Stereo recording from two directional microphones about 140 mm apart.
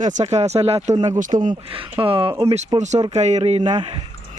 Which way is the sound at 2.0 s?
40° right (ahead or behind).